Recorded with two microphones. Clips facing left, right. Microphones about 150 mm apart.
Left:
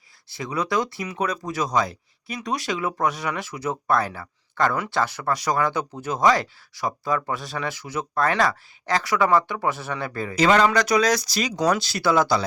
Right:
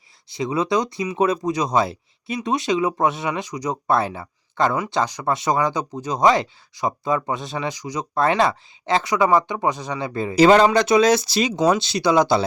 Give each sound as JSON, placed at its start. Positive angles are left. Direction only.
{"t": 0.3, "sound": "speech", "side_deg": -20}
{"t": 10.3, "sound": "speech", "side_deg": -30}